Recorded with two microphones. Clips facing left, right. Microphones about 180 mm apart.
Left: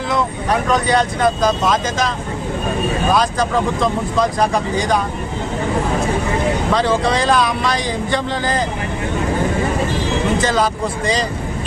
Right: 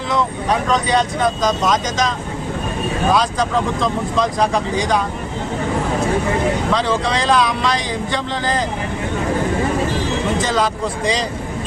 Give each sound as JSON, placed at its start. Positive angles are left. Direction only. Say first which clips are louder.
{"t": 0.7, "sound": "speech", "louder": "left 2 dB", "side_deg": 5}
{"t": 3.2, "sound": "speech", "louder": "left 1 dB", "side_deg": 5}
{"t": 6.7, "sound": "speech", "louder": "left 2 dB", "side_deg": 5}
{"t": 10.5, "sound": "speech", "louder": "left 1 dB", "side_deg": 5}